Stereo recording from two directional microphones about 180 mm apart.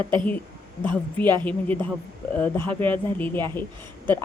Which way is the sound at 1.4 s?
10° left (ahead or behind).